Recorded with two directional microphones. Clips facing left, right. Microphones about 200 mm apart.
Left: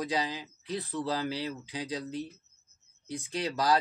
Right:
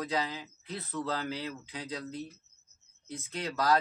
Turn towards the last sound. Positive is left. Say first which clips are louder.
# left 1 dB
turn(degrees=15)  # may be behind; listen again after turning